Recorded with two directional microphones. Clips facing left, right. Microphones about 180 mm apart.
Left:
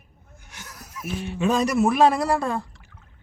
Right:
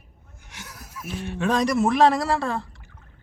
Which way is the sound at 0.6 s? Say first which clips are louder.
Right 1 dB; 10° right (ahead or behind).